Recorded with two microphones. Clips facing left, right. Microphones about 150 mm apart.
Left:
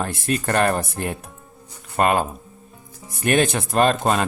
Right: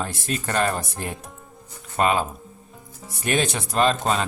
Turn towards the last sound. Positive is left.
turn(degrees=55)  # may be behind; listen again after turning